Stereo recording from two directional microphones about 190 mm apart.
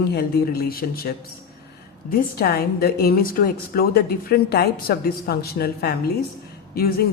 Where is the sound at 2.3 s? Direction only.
55° left (ahead or behind).